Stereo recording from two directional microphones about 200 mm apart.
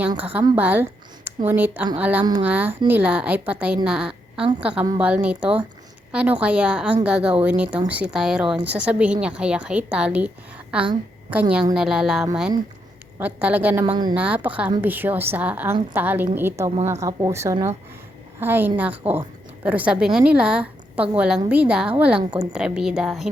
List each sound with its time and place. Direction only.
0.5 s a sound: 10° right (ahead or behind)
1.5 s a woman's voice: 10° right (ahead or behind)
13.8 s speech: 25° right (ahead or behind)
14.2 s a woman's voice: 5° right (ahead or behind)